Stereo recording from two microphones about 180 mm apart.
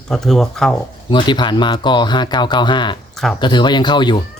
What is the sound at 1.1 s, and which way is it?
Speech, 25° left (ahead or behind).